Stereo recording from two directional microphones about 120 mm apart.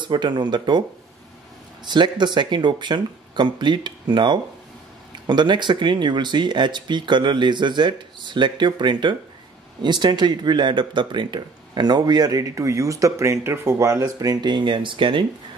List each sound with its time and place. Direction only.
0.0 s speech: 40° right (ahead or behind)
1.9 s speech: 40° right (ahead or behind)